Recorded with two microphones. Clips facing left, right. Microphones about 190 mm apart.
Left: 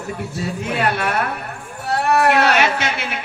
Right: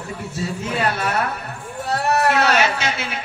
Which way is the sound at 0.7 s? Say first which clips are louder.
Left 2 dB; 60° left (ahead or behind).